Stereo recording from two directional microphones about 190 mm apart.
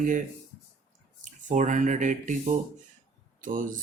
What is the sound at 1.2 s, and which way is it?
Speech, 40° right (ahead or behind).